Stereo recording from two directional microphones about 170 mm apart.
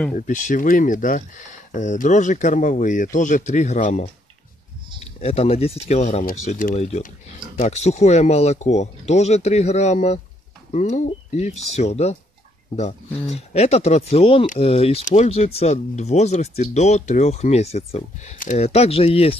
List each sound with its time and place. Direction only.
0.1 s speech: 45° left (ahead or behind)
5.2 s speech: 35° left (ahead or behind)
13.3 s speech: 40° left (ahead or behind)